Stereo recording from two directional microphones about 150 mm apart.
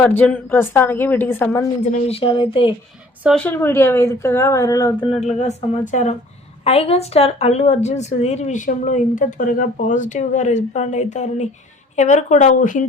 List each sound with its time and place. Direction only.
0.0 s a woman's voice: 10° left (ahead or behind)
1.8 s speech: 55° left (ahead or behind)
2.1 s speech: 35° left (ahead or behind)
3.4 s a woman's voice: 15° left (ahead or behind)
5.0 s speech: 50° left (ahead or behind)
6.7 s speech: 40° left (ahead or behind); by 12.8 s 60° left (ahead or behind)